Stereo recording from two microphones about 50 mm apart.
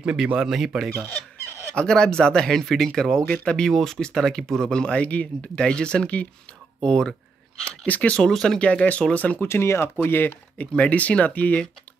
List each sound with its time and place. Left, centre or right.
0.0 s speech: centre
0.5 s speech: centre
1.8 s speech: centre
6.8 s speech: centre
7.8 s speech: left
8.2 s speech: centre
8.5 s speech: left
9.4 s speech: left
10.7 s speech: left